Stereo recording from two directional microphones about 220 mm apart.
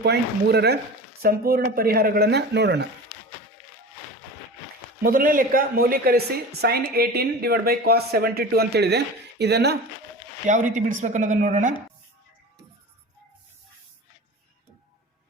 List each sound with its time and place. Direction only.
0.0 s speech: 45° right (ahead or behind)
5.0 s speech: 40° right (ahead or behind)
10.4 s speech: 35° right (ahead or behind)